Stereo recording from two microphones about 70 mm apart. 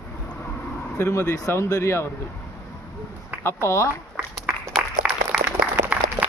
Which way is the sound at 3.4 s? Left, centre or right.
Left.